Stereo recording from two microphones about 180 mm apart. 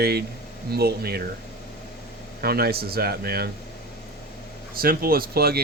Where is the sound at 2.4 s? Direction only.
60° right (ahead or behind).